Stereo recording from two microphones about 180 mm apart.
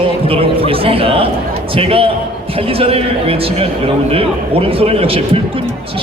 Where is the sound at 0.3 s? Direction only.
30° right (ahead or behind).